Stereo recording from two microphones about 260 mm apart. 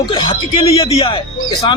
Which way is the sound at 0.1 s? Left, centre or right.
Centre.